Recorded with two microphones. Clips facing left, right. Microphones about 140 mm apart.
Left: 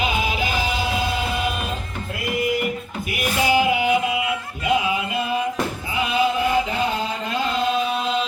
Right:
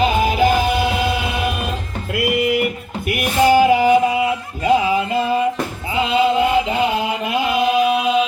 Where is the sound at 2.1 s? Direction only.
75° right (ahead or behind).